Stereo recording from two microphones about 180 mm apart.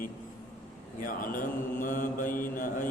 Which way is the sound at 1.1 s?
50° left (ahead or behind).